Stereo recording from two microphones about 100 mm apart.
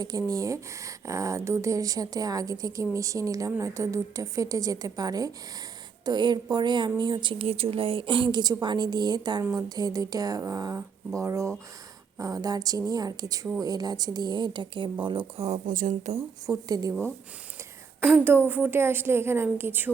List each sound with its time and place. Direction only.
0.0 s a woman's voice: 35° right (ahead or behind); by 7.4 s 55° right (ahead or behind)
7.4 s a woman's voice: 80° right; by 15.3 s 55° right (ahead or behind)
15.4 s speech: 85° right
16.5 s speech: 40° right (ahead or behind)
18.0 s a woman's voice: 25° right (ahead or behind)